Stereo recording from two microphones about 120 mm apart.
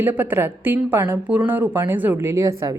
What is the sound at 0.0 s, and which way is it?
A woman's voice, 15° right (ahead or behind).